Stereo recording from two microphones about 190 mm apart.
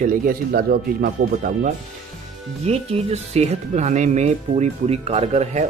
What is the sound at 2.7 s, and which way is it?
Speech, 30° right (ahead or behind).